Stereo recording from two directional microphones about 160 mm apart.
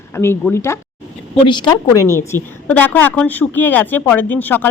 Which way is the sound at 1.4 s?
30° left (ahead or behind).